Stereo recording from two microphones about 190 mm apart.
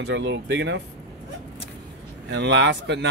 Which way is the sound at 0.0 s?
70° right (ahead or behind).